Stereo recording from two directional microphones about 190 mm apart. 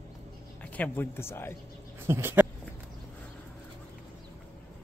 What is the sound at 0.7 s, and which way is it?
Speech, 10° left (ahead or behind).